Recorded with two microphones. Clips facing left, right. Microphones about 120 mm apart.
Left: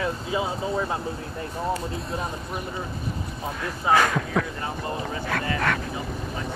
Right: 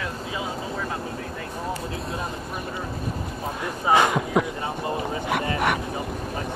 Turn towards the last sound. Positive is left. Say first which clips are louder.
# right 2 dB
turn(degrees=-20)  # may be behind; listen again after turning